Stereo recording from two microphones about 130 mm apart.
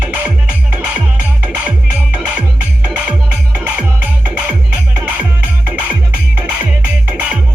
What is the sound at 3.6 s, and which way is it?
Music, 10° right (ahead or behind).